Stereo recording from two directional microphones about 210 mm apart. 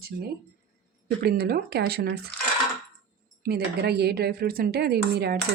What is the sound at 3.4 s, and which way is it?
Speech, 50° right (ahead or behind).